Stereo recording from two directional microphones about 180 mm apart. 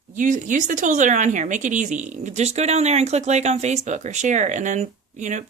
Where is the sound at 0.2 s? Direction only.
45° right (ahead or behind).